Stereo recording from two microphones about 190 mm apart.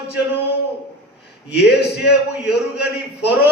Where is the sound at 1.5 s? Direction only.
60° left (ahead or behind).